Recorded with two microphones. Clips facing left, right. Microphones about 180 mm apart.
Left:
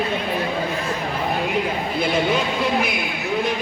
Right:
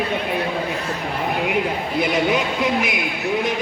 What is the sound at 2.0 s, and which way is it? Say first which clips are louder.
Speech: right 1 dB; 15° right (ahead or behind).